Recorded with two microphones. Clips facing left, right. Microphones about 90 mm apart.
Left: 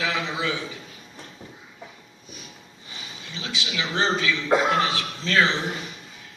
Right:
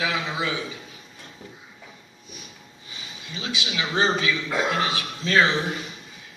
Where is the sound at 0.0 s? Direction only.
15° right (ahead or behind).